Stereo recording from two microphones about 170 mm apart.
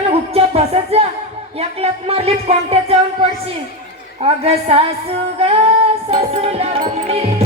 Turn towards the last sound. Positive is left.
turn(degrees=-35)  # may be behind; listen again after turning